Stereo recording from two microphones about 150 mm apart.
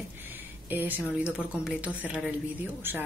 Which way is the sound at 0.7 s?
10° right (ahead or behind).